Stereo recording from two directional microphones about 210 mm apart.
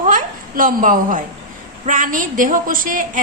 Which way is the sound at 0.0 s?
40° right (ahead or behind).